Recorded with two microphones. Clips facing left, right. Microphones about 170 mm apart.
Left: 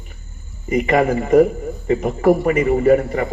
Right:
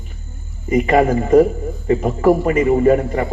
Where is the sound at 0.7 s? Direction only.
35° right (ahead or behind).